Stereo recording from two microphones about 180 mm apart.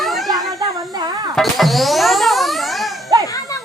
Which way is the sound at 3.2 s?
20° left (ahead or behind).